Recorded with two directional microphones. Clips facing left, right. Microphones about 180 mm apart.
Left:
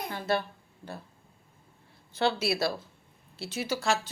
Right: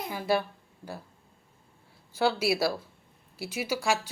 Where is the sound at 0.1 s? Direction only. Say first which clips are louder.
Right 3 dB; 10° right (ahead or behind).